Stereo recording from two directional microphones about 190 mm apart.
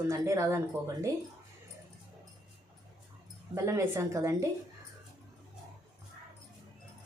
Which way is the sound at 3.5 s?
15° right (ahead or behind).